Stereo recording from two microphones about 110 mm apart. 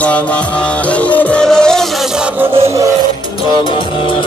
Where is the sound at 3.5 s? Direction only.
50° left (ahead or behind).